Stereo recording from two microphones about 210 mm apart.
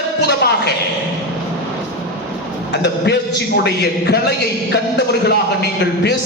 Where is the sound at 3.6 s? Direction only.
55° left (ahead or behind).